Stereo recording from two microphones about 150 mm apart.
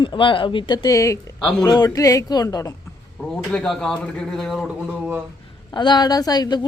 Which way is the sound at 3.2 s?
5° left (ahead or behind).